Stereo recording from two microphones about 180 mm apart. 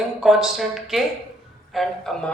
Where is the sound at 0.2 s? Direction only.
Centre (ahead or behind).